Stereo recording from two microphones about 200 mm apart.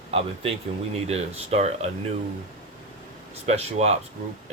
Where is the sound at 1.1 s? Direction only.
35° right (ahead or behind).